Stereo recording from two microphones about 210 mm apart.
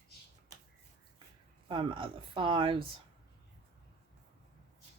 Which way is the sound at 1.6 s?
25° right (ahead or behind).